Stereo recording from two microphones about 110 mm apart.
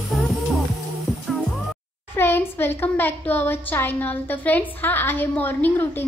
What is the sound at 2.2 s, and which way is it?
A woman's voice, 20° left (ahead or behind).